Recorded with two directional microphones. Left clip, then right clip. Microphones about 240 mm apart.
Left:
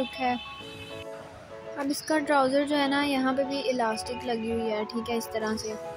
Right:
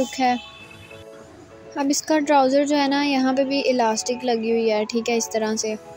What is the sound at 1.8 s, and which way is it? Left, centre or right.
A woman's voice, centre.